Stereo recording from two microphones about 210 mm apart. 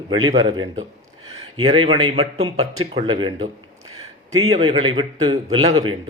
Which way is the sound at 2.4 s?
85° right.